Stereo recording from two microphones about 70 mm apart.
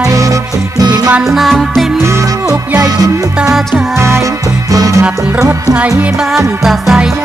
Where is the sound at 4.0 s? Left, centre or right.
Right.